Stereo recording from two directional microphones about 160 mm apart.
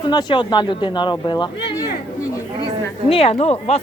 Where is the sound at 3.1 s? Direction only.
40° left (ahead or behind).